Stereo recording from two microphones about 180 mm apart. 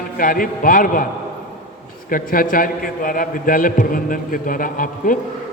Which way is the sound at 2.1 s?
50° left (ahead or behind).